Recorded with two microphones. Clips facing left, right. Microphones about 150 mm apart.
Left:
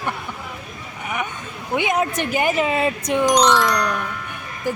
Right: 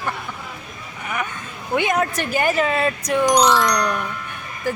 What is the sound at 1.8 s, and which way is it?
Speech, 15° left (ahead or behind).